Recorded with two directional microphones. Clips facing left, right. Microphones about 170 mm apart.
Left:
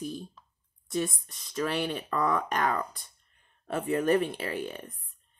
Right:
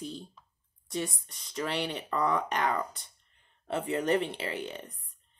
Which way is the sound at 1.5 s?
20° right (ahead or behind).